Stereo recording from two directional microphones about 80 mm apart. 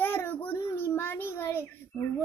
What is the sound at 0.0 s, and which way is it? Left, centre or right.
Child singing, left.